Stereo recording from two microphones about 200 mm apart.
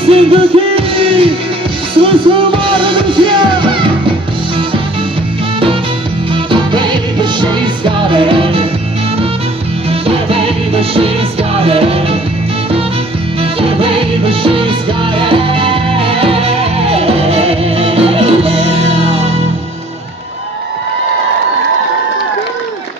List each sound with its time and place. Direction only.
0.0 s music: 30° right (ahead or behind)
6.3 s music: 25° right (ahead or behind)
9.8 s music: 30° right (ahead or behind)
13.4 s music: 30° right (ahead or behind)